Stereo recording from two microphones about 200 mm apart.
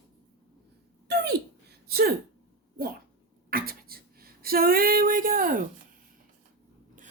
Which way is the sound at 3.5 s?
50° right (ahead or behind).